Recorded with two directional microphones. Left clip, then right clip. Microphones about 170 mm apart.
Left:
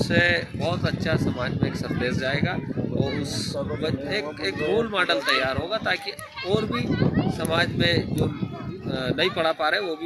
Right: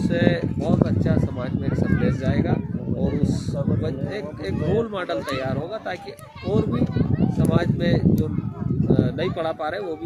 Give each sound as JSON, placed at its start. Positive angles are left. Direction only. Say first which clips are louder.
{"t": 0.1, "sound": "speech", "louder": "left 2 dB", "side_deg": -25}
{"t": 4.9, "sound": "speech", "louder": "left 4 dB", "side_deg": -20}
{"t": 7.3, "sound": "speech", "louder": "right 1 dB", "side_deg": -20}